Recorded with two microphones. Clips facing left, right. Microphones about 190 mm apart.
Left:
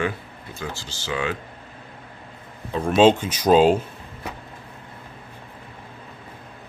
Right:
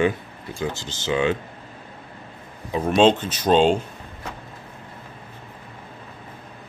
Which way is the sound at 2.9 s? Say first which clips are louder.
Left 1 dB; 5° left (ahead or behind).